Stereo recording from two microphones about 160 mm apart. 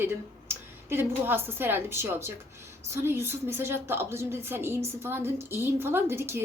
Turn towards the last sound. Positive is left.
turn(degrees=-15)  # may be behind; listen again after turning